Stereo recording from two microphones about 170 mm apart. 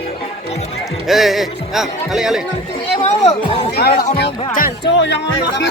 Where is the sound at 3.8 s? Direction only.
70° left (ahead or behind).